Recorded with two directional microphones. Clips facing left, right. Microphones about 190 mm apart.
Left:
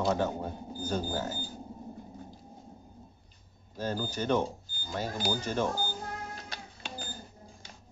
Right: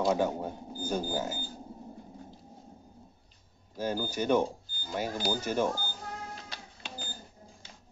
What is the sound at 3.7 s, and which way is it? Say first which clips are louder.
Speech: right 1 dB; 10° right (ahead or behind).